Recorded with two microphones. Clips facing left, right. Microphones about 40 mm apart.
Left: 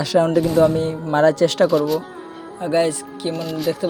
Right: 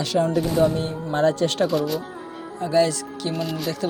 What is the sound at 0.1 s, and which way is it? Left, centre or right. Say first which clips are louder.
Speech: left 5 dB; left.